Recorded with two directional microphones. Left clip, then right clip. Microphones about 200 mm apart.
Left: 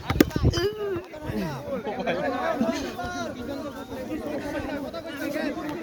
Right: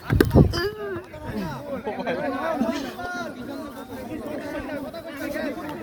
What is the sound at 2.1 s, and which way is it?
Chatter, 40° left (ahead or behind).